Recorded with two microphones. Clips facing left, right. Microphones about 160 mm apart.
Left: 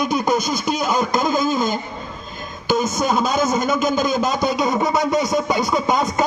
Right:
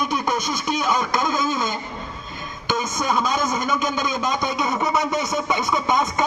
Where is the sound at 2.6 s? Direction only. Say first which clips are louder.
Left 5 dB; 10° left (ahead or behind).